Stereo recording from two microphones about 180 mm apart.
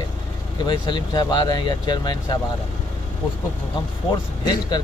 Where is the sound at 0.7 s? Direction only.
25° left (ahead or behind).